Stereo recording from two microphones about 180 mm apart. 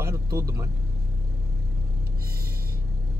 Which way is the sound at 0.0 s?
15° right (ahead or behind).